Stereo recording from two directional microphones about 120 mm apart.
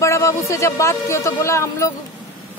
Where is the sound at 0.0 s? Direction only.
25° left (ahead or behind).